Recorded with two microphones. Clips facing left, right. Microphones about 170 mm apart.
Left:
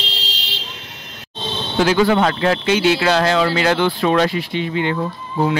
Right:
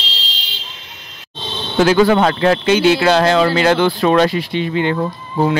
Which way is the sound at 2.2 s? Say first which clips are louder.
Right 3 dB; 45° right (ahead or behind).